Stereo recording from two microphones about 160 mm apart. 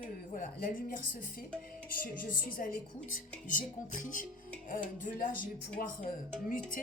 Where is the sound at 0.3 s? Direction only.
60° left (ahead or behind).